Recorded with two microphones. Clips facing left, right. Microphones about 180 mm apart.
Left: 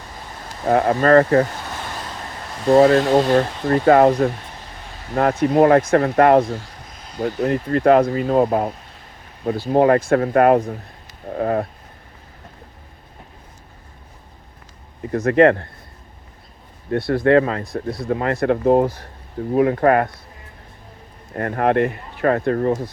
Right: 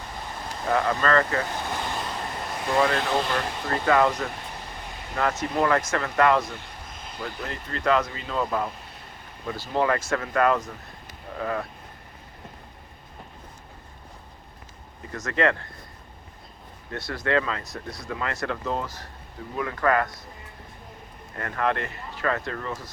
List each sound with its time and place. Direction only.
0.7 s speech: 50° left (ahead or behind)
2.6 s speech: 40° left (ahead or behind)
15.1 s speech: 55° left (ahead or behind)
16.9 s speech: 55° left (ahead or behind)
21.3 s speech: 40° left (ahead or behind)